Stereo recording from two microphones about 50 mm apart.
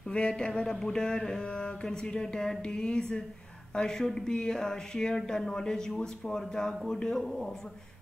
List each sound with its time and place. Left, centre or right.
0.1 s speech: centre